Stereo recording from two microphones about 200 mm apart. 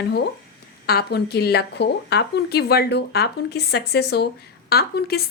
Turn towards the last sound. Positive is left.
turn(degrees=50)  # may be behind; listen again after turning